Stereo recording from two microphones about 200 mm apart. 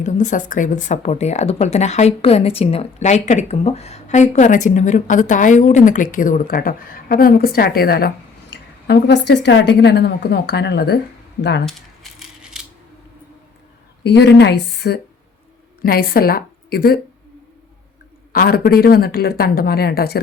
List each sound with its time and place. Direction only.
0.0 s a woman's voice: 40° left (ahead or behind); by 11.0 s 55° left (ahead or behind)
11.6 s rattle: centre (ahead or behind)
14.0 s a woman's voice: 55° left (ahead or behind)
18.3 s speech: 50° left (ahead or behind)